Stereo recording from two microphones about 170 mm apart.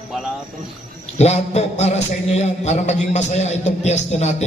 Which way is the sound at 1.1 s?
40° left (ahead or behind).